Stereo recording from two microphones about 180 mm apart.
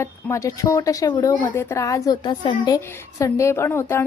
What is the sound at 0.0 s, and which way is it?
Speech, 15° left (ahead or behind).